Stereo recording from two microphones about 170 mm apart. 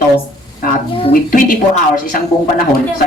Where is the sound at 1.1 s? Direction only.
55° left (ahead or behind).